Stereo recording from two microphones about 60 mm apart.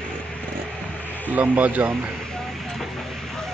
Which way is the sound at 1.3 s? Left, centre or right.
Right.